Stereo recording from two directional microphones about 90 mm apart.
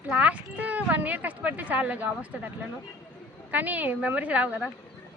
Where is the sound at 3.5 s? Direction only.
20° right (ahead or behind).